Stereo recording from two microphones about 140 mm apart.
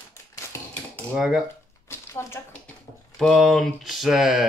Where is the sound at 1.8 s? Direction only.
15° left (ahead or behind).